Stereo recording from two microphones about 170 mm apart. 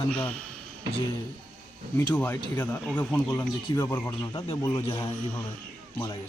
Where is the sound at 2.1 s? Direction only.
10° left (ahead or behind); by 5.1 s 25° left (ahead or behind).